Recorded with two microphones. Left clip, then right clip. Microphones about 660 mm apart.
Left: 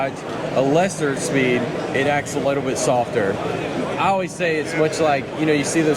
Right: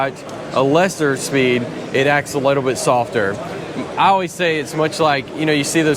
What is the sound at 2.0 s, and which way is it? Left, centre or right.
Speech, right.